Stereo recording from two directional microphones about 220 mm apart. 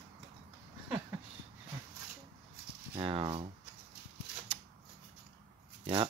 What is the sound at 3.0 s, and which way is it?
Speech, 25° right (ahead or behind).